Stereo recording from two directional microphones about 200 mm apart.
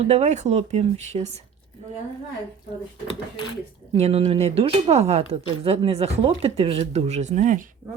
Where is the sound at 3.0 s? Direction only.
30° left (ahead or behind).